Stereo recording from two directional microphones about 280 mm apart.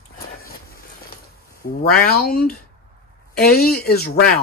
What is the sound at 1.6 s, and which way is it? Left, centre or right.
Speech, left.